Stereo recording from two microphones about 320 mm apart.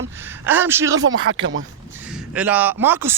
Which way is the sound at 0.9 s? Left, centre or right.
Right.